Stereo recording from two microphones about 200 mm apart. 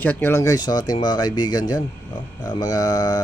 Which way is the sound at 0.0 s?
10° left (ahead or behind).